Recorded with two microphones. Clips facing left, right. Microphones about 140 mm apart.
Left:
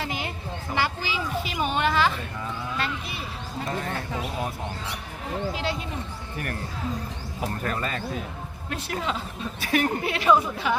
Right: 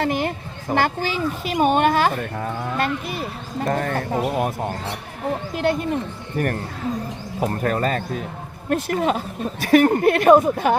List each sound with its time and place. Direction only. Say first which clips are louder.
0.0 s speech: right 9 dB; 55° right (ahead or behind)